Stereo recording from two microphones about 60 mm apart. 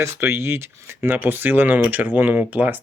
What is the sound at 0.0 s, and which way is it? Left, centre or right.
Speech, right.